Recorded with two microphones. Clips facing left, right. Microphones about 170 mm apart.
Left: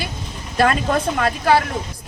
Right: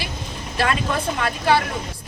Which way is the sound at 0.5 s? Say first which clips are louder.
Left 5 dB; 50° left (ahead or behind).